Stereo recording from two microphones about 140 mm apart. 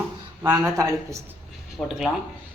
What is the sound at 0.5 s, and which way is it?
Speech, 20° right (ahead or behind).